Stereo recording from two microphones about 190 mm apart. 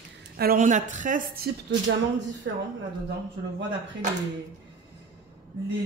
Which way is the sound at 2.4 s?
70° right (ahead or behind).